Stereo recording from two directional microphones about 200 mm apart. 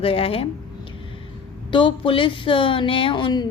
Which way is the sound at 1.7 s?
25° left (ahead or behind).